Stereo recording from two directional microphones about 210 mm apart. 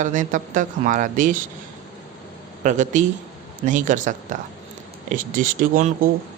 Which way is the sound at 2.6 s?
35° right (ahead or behind).